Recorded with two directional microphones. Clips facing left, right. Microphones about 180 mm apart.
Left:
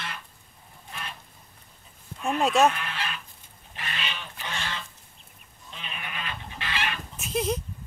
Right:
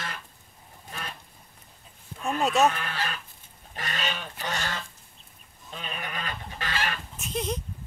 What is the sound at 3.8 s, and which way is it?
Goose, 40° right (ahead or behind).